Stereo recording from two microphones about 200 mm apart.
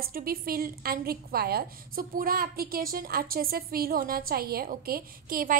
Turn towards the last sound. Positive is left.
turn(degrees=-45)  # may be behind; listen again after turning